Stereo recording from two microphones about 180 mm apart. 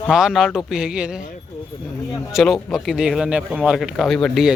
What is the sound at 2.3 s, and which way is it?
Speech, centre (ahead or behind).